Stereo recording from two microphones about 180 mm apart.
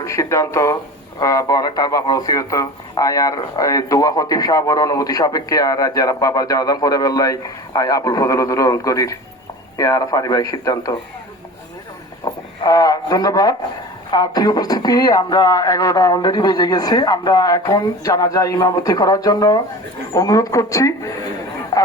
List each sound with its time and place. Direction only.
0.0 s speech: 15° left (ahead or behind)
12.2 s radio: 20° left (ahead or behind)
14.1 s speech: 20° left (ahead or behind)